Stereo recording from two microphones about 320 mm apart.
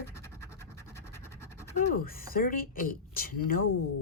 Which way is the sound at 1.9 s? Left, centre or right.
Left.